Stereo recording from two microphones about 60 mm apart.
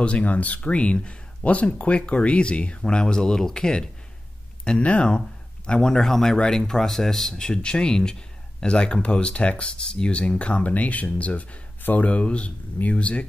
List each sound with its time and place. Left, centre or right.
0.0 s speech: left